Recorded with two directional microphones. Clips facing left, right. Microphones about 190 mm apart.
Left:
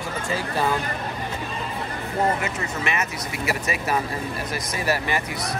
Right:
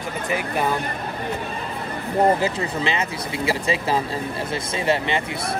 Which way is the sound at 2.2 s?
30° right (ahead or behind).